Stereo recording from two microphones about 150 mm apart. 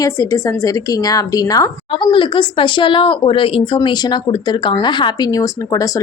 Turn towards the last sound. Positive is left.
turn(degrees=25)  # may be behind; listen again after turning